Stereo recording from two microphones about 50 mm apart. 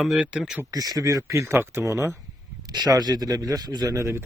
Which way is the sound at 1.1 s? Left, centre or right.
Right.